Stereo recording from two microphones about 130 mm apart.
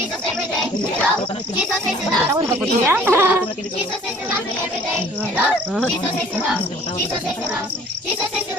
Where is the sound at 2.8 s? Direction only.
15° right (ahead or behind).